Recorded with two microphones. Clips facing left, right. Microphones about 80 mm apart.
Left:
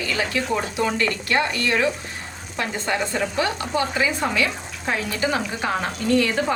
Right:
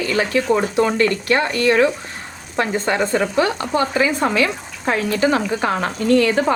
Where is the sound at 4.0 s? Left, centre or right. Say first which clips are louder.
Right 6 dB; right.